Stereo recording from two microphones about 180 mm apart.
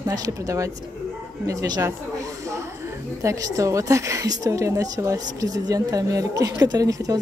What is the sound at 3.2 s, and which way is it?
Speech, 15° right (ahead or behind).